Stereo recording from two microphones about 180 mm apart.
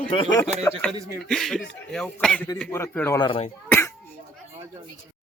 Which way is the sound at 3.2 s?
30° left (ahead or behind).